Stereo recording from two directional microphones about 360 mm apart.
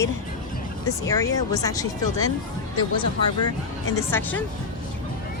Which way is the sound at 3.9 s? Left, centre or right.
Centre.